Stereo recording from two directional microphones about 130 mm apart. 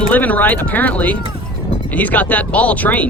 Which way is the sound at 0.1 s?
10° left (ahead or behind).